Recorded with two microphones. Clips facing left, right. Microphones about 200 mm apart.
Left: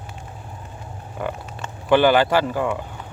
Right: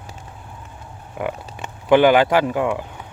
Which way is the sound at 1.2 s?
15° right (ahead or behind).